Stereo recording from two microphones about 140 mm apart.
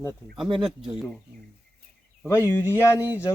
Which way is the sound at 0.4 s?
35° right (ahead or behind).